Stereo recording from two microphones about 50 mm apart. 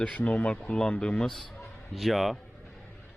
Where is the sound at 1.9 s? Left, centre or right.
Centre.